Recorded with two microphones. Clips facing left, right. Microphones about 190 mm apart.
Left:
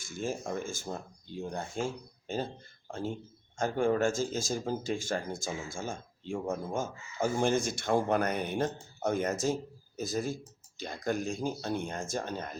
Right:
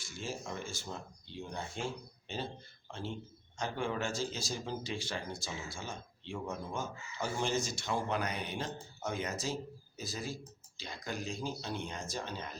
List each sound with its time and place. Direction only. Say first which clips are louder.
0.0 s speech: left 7 dB; 50° left (ahead or behind)